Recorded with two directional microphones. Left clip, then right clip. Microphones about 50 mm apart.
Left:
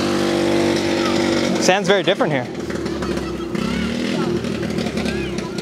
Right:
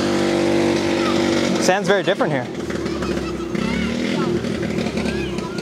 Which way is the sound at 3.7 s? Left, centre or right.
Centre.